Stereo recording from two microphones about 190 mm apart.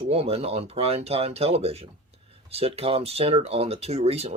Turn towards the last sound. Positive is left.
turn(degrees=-30)  # may be behind; listen again after turning